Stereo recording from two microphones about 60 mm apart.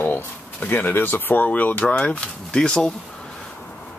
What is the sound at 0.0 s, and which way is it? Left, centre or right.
Speech, left.